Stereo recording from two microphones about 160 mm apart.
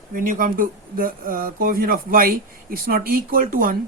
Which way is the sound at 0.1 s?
60° right (ahead or behind).